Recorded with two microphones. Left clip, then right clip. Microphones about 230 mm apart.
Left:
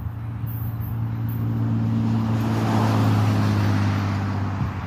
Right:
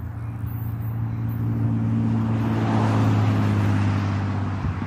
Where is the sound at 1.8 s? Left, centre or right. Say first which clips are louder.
Left 1 dB; left; by 4.7 s centre.